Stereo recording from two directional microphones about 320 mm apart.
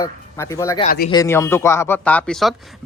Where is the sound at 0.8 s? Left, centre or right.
Left.